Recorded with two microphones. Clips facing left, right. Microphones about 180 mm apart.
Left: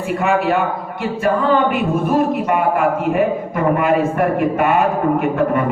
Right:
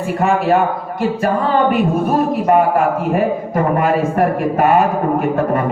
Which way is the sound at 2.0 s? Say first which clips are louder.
Right 2 dB; 40° right (ahead or behind).